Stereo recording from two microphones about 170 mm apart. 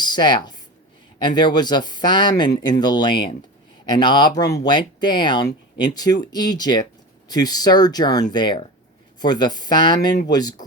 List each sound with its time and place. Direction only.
0.0 s speech: 25° left (ahead or behind)